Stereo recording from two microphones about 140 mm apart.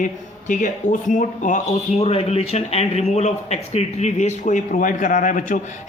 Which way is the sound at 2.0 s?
45° left (ahead or behind).